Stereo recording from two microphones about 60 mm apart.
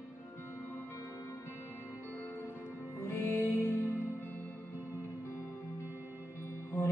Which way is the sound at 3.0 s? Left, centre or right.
Left.